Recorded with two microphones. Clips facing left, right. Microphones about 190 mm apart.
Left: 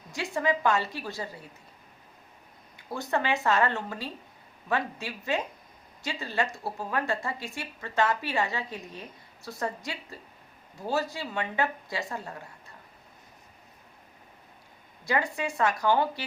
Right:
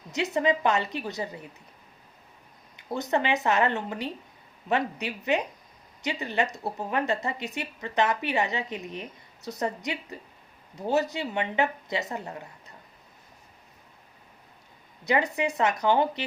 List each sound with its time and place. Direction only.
0.1 s speech: 20° right (ahead or behind)
2.7 s speech: 20° right (ahead or behind)
15.0 s speech: 20° right (ahead or behind)